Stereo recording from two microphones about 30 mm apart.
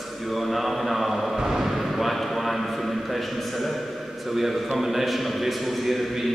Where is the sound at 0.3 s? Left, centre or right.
Centre.